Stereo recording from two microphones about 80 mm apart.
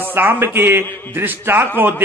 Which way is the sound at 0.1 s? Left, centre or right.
Right.